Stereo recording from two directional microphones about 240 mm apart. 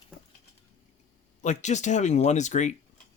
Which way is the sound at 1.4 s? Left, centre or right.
Left.